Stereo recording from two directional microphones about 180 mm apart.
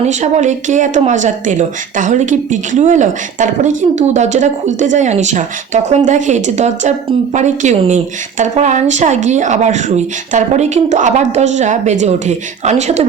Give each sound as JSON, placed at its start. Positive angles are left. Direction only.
{"t": 0.0, "sound": "speech", "side_deg": -40}